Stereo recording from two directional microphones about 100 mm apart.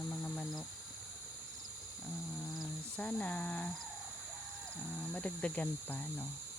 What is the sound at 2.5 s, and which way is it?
Cricket, centre (ahead or behind).